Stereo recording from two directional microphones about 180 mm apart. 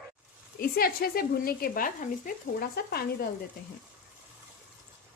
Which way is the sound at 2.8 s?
60° left (ahead or behind).